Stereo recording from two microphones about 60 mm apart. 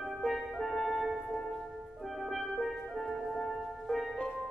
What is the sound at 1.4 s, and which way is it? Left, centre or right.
Music, centre.